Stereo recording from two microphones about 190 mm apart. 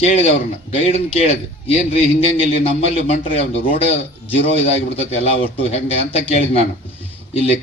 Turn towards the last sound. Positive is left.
turn(degrees=35)  # may be behind; listen again after turning